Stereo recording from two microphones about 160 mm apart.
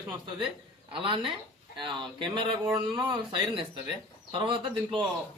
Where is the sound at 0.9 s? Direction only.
30° right (ahead or behind).